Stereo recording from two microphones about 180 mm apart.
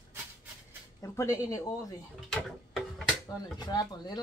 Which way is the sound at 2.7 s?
Centre (ahead or behind).